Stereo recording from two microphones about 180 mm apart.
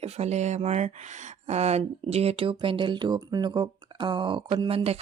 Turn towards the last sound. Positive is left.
turn(degrees=-25)  # may be behind; listen again after turning